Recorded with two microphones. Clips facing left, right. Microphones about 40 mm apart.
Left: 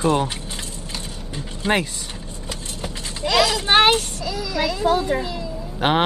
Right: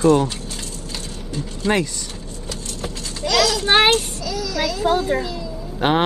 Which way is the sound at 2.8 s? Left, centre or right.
Left.